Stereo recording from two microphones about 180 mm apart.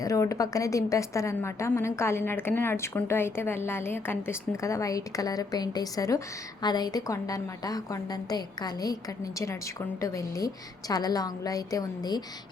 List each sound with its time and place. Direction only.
0.0 s a woman's voice: 20° left (ahead or behind)
10.0 s a woman's voice: 15° left (ahead or behind)